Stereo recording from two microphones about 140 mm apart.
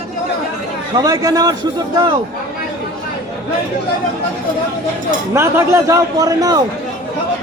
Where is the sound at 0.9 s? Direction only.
25° right (ahead or behind).